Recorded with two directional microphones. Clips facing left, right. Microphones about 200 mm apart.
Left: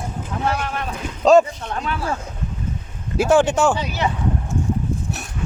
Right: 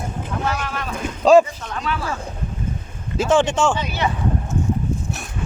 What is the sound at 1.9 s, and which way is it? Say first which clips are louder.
Speech: right 3 dB; 45° left (ahead or behind).